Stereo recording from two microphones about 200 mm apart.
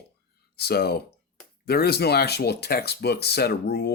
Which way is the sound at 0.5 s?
50° left (ahead or behind).